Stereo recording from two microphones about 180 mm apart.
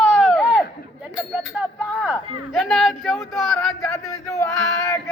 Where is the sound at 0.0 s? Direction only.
5° left (ahead or behind).